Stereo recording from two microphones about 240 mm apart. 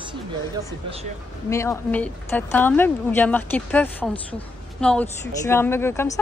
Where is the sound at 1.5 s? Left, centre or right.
Centre.